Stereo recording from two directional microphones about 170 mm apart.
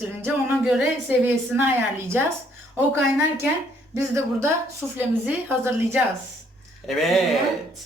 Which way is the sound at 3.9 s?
15° right (ahead or behind).